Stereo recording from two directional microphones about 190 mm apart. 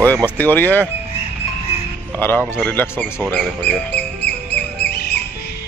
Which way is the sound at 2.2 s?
10° left (ahead or behind).